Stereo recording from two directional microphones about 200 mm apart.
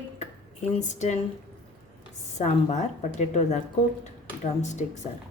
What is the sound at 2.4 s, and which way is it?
A woman's voice, 35° left (ahead or behind).